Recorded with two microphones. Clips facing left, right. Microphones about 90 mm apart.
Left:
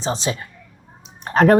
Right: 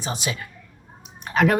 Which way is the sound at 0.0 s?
30° left (ahead or behind).